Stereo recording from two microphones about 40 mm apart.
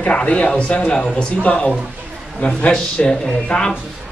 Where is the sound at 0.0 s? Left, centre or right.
Left.